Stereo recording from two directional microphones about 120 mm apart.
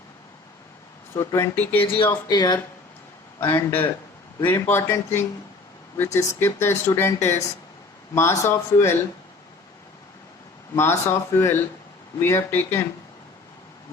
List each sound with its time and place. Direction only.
1.1 s speech: 25° left (ahead or behind)
1.8 s speech: 45° left (ahead or behind)
3.4 s a man's voice: 15° left (ahead or behind)
10.8 s speech: 20° left (ahead or behind)